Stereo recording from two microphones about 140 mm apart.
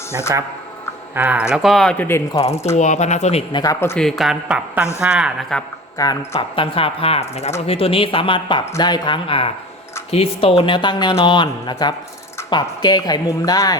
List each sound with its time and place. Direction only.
1.1 s speech: 10° right (ahead or behind); by 2.0 s 5° left (ahead or behind)
2.0 s speech: 20° left (ahead or behind)
2.7 s speech: 55° left (ahead or behind)
3.5 s speech: 25° left (ahead or behind)
3.9 s speech: centre (ahead or behind)
6.0 s speech: 25° left (ahead or behind)
6.3 s speech: 40° left (ahead or behind)